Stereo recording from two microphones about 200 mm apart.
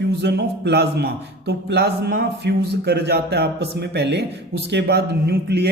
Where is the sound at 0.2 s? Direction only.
60° right (ahead or behind).